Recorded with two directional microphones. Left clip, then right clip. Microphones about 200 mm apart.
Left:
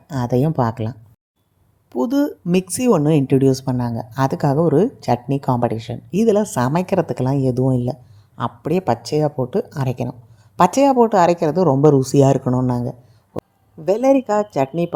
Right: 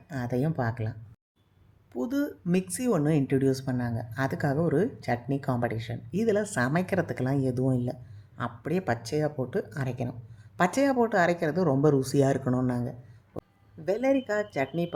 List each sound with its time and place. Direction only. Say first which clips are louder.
0.1 s speech: left 11 dB; 35° left (ahead or behind)